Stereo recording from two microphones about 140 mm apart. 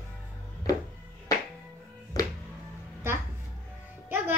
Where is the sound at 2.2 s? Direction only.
25° left (ahead or behind).